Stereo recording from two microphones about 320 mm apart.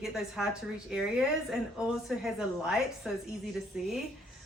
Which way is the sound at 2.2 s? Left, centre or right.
Centre.